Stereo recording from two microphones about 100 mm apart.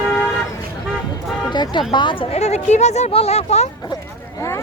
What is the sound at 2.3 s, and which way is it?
Speech, 90° left.